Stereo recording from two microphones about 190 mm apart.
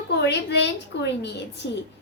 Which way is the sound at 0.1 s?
65° left (ahead or behind).